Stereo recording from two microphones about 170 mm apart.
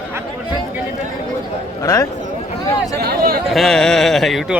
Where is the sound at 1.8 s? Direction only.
20° left (ahead or behind).